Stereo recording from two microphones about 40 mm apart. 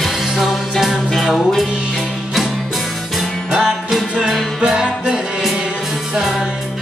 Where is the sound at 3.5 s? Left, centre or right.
Centre.